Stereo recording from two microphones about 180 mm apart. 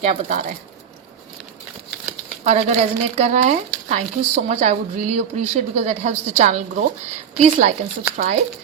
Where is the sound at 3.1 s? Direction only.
35° right (ahead or behind).